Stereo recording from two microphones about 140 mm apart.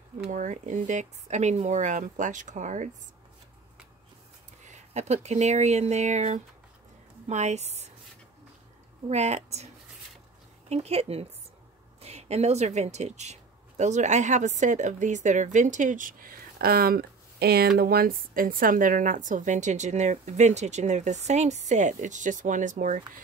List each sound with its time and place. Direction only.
0.3 s speech: 65° right (ahead or behind)
4.6 s a woman's voice: 55° right (ahead or behind)
9.1 s a woman's voice: 50° right (ahead or behind)
10.7 s a woman's voice: 45° right (ahead or behind); by 23.2 s 70° right (ahead or behind)